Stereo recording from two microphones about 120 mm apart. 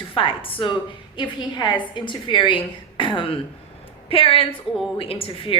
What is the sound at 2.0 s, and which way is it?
Speech, 40° left (ahead or behind).